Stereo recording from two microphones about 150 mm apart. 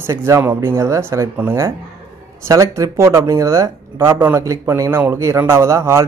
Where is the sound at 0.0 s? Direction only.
20° right (ahead or behind).